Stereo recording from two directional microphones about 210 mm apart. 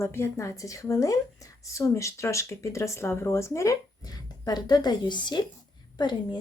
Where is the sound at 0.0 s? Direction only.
10° left (ahead or behind).